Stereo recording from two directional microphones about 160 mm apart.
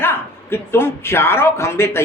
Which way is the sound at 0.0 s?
15° left (ahead or behind).